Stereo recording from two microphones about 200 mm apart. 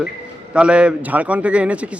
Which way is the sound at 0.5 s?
5° right (ahead or behind).